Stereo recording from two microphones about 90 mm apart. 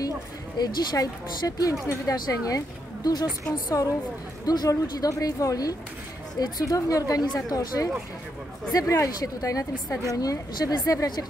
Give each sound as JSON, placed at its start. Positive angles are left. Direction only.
{"t": 0.6, "sound": "speech", "side_deg": 50}
{"t": 1.6, "sound": "speech", "side_deg": 40}